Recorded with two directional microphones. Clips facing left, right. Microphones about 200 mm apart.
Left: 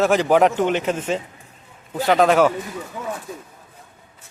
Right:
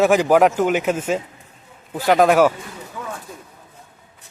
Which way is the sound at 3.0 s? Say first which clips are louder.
Left 1 dB; 20° left (ahead or behind).